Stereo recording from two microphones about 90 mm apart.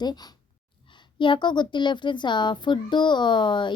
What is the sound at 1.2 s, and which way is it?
A woman's voice, 60° left (ahead or behind).